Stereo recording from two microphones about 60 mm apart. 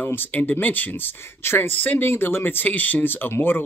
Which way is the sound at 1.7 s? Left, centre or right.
Left.